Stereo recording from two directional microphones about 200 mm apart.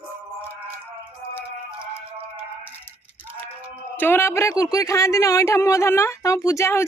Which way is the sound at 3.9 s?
10° left (ahead or behind).